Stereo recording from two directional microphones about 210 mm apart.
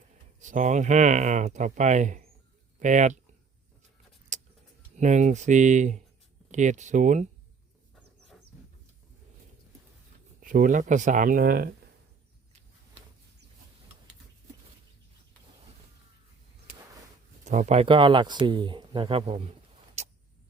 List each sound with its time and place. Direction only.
0.3 s speech: 35° right (ahead or behind)
4.3 s keys jangling: 35° right (ahead or behind)
4.9 s speech: 35° right (ahead or behind)
10.4 s speech: 40° right (ahead or behind)
17.4 s speech: 35° right (ahead or behind)
20.0 s vehicle: 30° right (ahead or behind)